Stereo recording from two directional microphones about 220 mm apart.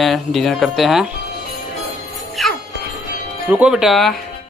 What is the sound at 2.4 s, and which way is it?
Music, centre (ahead or behind).